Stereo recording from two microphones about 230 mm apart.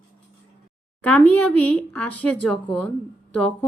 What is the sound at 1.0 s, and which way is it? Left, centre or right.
A woman's voice, centre.